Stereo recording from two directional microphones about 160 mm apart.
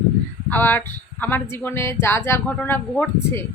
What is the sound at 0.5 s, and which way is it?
A woman's voice, 10° left (ahead or behind).